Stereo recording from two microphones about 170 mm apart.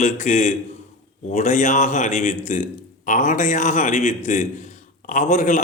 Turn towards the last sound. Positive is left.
turn(degrees=50)  # may be behind; listen again after turning